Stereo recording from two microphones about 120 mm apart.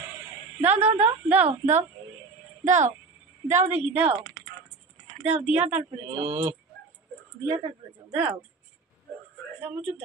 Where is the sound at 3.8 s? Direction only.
10° right (ahead or behind).